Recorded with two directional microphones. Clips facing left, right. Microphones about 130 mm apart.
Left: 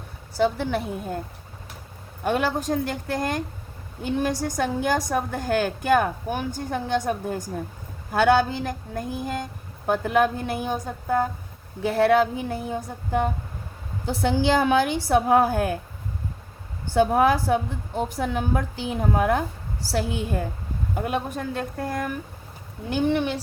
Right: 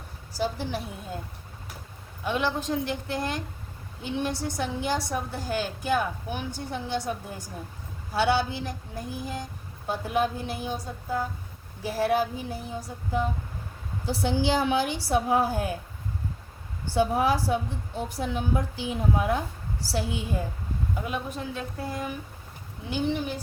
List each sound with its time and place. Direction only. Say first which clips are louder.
0.3 s a woman's voice: left 7 dB; 60° left (ahead or behind)
2.2 s a woman's voice: left 4 dB; 50° left (ahead or behind)
16.9 s a woman's voice: left 5 dB; 55° left (ahead or behind); by 23.4 s 70° left (ahead or behind)